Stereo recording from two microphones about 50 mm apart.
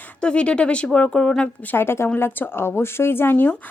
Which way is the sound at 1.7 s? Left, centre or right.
Left.